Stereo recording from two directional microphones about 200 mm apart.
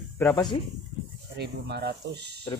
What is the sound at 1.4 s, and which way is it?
Speech, 55° right (ahead or behind).